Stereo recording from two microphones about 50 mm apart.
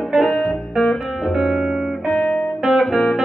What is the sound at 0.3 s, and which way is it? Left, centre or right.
Music, centre.